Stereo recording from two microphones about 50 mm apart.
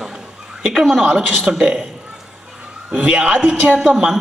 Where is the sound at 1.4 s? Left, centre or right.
Centre.